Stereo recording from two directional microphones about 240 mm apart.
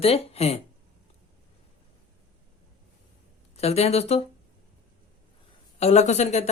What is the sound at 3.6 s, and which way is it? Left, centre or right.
Speech, left.